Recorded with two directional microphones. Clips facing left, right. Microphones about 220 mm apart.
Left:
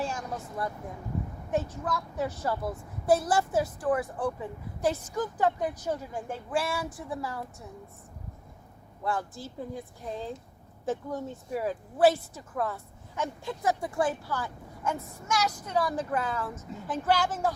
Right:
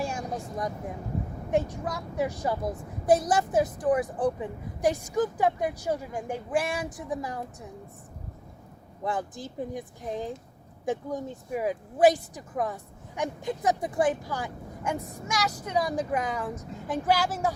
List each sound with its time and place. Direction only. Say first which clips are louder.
0.0 s vehicle: right 2 dB; 10° right (ahead or behind)
1.5 s a woman's voice: right 3 dB; 10° right (ahead or behind)
9.0 s a woman's voice: right 1 dB; 20° right (ahead or behind)